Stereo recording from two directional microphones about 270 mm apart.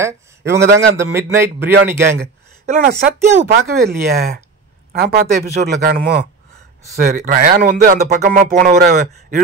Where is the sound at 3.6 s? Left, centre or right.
Right.